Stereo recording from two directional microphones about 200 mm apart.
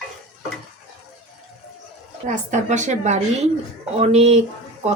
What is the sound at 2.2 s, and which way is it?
Speech, 35° right (ahead or behind).